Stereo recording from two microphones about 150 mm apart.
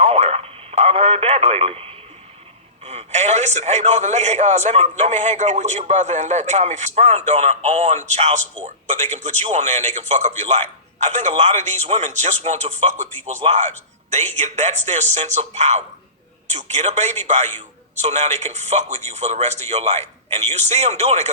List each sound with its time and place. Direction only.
0.0 s radio: 40° right (ahead or behind)
2.8 s a man's voice: 45° right (ahead or behind)